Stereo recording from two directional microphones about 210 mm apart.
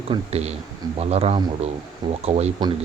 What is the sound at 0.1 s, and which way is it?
Speech, 30° right (ahead or behind).